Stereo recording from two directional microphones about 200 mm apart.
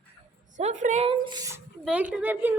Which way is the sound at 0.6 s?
35° right (ahead or behind).